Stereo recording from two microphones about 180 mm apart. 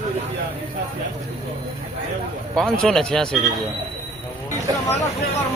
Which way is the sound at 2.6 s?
Centre (ahead or behind).